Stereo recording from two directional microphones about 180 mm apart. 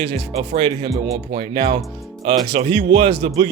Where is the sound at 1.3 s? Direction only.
25° right (ahead or behind).